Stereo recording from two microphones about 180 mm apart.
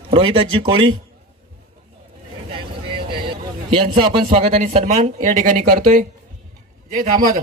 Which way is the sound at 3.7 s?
30° right (ahead or behind).